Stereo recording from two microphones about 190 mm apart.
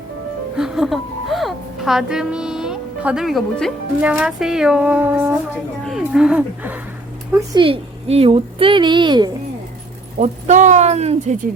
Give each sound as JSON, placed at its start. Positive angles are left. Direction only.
{"t": 0.5, "sound": "a woman's voice", "side_deg": 0}
{"t": 7.3, "sound": "a woman's voice", "side_deg": -25}
{"t": 10.2, "sound": "speech", "side_deg": -40}